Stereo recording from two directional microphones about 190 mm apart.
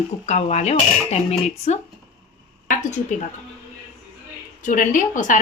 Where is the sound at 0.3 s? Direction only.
35° left (ahead or behind).